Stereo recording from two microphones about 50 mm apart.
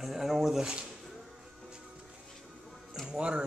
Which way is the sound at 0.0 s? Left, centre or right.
Centre.